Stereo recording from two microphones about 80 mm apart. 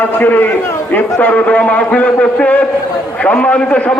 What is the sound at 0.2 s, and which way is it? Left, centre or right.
A man's voice, left.